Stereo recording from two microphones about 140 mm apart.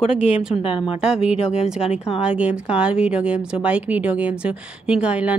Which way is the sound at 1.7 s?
45° left (ahead or behind).